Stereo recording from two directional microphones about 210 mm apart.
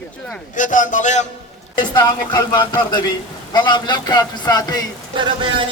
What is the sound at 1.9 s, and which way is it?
A man's voice, 20° left (ahead or behind).